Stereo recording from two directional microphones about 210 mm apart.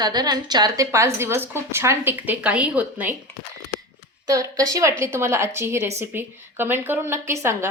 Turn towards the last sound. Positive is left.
turn(degrees=-10)  # may be behind; listen again after turning